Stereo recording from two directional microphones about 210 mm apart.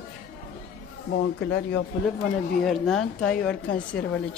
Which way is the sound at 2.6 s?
Centre (ahead or behind).